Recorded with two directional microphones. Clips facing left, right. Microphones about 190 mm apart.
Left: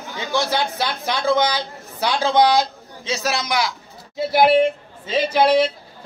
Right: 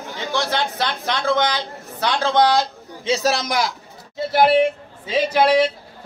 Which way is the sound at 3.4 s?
50° right (ahead or behind).